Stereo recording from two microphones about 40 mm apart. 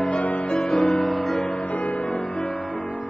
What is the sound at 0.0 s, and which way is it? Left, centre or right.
Music, left.